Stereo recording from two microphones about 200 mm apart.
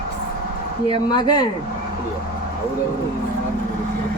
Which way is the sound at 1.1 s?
20° left (ahead or behind).